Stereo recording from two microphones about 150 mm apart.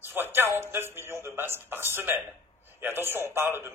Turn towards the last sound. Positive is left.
turn(degrees=-15)  # may be behind; listen again after turning